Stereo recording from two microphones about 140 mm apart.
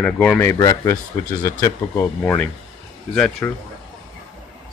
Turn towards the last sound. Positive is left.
turn(degrees=10)  # may be behind; listen again after turning